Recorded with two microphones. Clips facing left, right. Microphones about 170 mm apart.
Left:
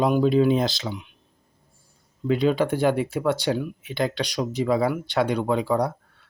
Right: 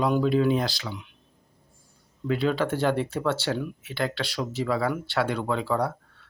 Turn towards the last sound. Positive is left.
turn(degrees=15)  # may be behind; listen again after turning